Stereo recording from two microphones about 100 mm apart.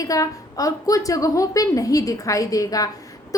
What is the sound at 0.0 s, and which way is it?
A woman's voice, 35° left (ahead or behind).